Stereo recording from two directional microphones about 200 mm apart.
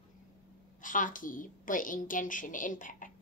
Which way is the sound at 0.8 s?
40° left (ahead or behind).